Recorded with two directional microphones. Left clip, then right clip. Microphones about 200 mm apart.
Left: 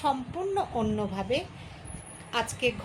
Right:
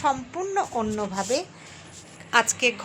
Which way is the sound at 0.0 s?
10° right (ahead or behind).